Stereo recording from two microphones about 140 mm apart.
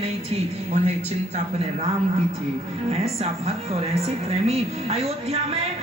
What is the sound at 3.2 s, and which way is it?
Speech, 45° right (ahead or behind).